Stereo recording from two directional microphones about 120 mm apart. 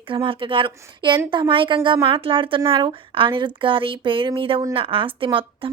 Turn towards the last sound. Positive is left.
turn(degrees=-45)  # may be behind; listen again after turning